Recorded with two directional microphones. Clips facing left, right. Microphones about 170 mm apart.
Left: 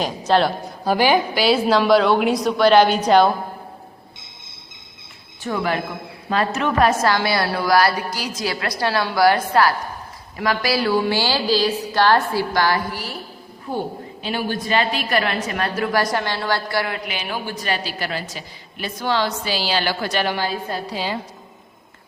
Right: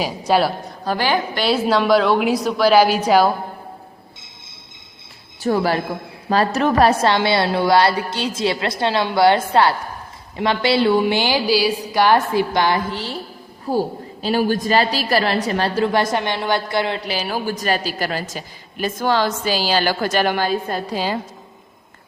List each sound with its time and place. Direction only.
0.0 s a woman's voice: 5° right (ahead or behind)
0.9 s a woman's voice: 15° left (ahead or behind); by 3.3 s 5° right (ahead or behind)
5.4 s a woman's voice: 35° right (ahead or behind)
13.7 s a woman's voice: 35° right (ahead or behind)